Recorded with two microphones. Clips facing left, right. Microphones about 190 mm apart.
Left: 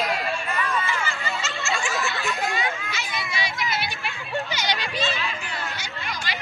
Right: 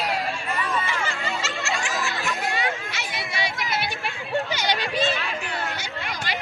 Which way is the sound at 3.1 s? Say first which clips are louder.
Right 1 dB; 60° right (ahead or behind).